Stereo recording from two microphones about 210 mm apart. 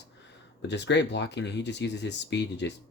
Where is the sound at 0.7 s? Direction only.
55° left (ahead or behind).